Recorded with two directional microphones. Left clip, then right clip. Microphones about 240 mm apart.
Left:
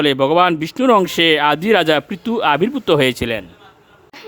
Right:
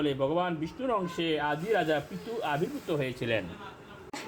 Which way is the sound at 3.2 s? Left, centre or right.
Left.